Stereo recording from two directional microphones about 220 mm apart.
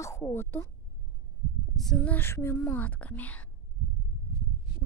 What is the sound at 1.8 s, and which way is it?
Speech, 5° left (ahead or behind).